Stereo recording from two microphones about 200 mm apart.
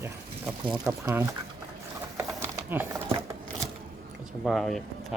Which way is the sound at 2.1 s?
10° right (ahead or behind).